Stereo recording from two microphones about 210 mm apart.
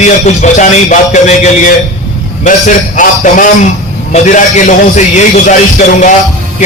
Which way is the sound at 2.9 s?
40° left (ahead or behind).